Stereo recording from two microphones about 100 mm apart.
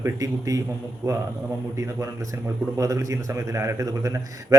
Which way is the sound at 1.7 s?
30° right (ahead or behind).